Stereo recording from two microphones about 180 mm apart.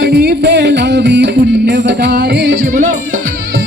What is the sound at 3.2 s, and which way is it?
Music, 60° right (ahead or behind).